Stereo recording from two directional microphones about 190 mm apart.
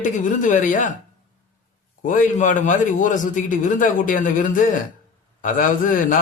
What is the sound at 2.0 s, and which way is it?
A man's voice, 45° left (ahead or behind).